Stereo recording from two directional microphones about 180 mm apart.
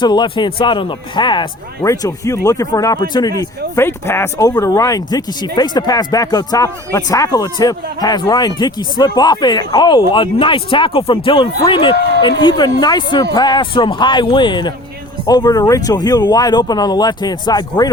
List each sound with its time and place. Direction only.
0.0 s speech: 25° left (ahead or behind)